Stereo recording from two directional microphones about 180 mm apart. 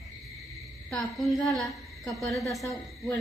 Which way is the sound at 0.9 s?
Centre (ahead or behind).